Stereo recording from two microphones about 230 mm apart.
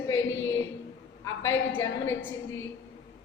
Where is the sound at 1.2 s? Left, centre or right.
Centre.